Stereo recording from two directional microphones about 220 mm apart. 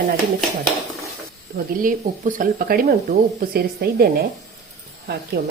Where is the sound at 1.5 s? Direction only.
35° right (ahead or behind).